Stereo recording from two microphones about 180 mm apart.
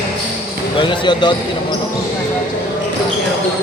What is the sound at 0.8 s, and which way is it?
Basketball bounce, 25° left (ahead or behind).